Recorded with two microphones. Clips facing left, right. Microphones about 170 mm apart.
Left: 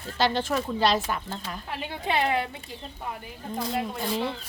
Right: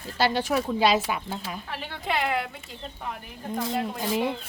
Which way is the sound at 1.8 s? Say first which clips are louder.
Left 2 dB; 20° left (ahead or behind).